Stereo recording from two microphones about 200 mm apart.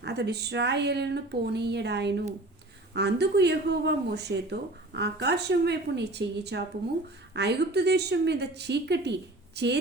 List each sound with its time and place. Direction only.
0.0 s speech: 55° right (ahead or behind)